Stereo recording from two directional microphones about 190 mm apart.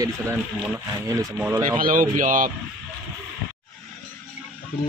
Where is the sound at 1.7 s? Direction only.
50° right (ahead or behind).